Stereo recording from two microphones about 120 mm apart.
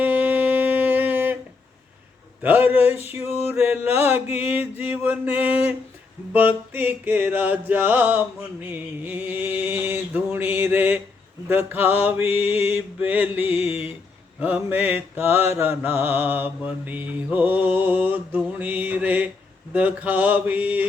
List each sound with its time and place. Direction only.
0.0 s a sound: 15° right (ahead or behind)
2.4 s mantra: 15° right (ahead or behind)
3.0 s male singing: 60° left (ahead or behind)
3.5 s mantra: 20° right (ahead or behind)